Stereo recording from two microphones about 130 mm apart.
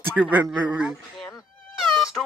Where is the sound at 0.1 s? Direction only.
10° right (ahead or behind).